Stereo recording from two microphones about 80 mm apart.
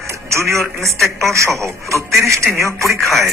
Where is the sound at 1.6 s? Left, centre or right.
Right.